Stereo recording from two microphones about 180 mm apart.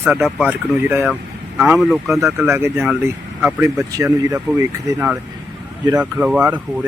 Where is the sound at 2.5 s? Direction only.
15° right (ahead or behind).